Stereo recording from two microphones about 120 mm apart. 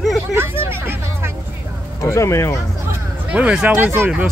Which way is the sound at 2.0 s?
25° left (ahead or behind).